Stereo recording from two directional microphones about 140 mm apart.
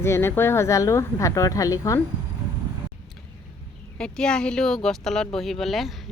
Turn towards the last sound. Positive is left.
turn(degrees=0)  # may be behind; listen again after turning